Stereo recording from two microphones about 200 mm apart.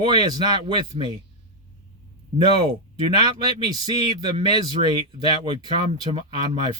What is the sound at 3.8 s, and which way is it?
Speech, 20° right (ahead or behind).